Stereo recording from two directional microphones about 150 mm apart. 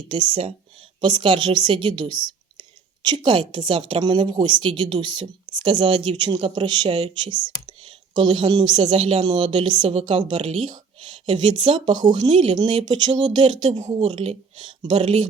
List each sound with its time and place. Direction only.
0.1 s a woman's voice: 35° right (ahead or behind)